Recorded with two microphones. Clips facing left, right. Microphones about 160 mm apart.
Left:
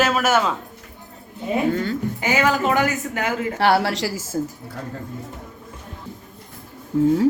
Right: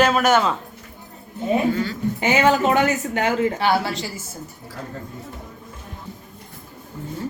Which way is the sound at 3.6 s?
75° left (ahead or behind).